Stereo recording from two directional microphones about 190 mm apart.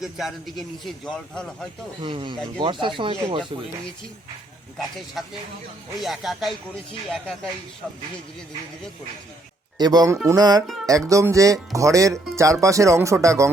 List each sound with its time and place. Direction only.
0.0 s a man's voice: centre (ahead or behind)
2.0 s speech: 25° right (ahead or behind)
4.8 s a man's voice: centre (ahead or behind)
9.7 s speech: 20° right (ahead or behind)